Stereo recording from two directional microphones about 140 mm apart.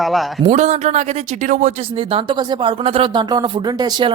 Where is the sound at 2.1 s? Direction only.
35° right (ahead or behind).